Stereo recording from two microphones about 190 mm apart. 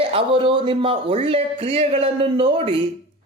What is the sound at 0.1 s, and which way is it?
Speech, 30° right (ahead or behind).